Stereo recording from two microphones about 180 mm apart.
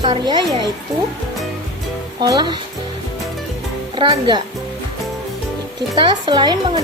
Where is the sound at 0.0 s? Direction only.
25° right (ahead or behind).